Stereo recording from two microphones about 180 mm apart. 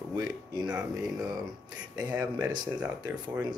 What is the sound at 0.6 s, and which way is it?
Speech, 5° right (ahead or behind).